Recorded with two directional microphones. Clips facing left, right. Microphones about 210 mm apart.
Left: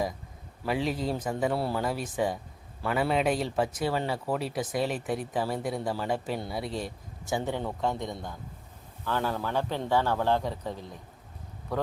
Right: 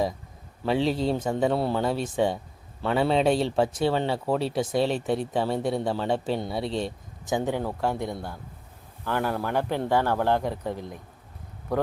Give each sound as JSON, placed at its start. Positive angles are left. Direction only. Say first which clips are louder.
{"t": 0.6, "sound": "speech", "louder": "right 5 dB", "side_deg": -30}